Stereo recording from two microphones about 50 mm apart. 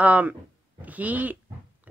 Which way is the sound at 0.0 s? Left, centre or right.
Right.